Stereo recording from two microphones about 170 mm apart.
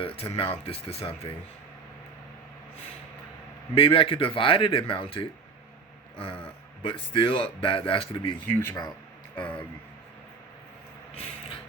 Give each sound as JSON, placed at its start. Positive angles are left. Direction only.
{"t": 0.0, "sound": "speech", "side_deg": 35}
{"t": 3.8, "sound": "speech", "side_deg": 30}
{"t": 8.5, "sound": "speech", "side_deg": 15}